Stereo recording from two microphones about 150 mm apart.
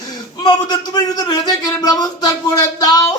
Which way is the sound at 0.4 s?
30° left (ahead or behind).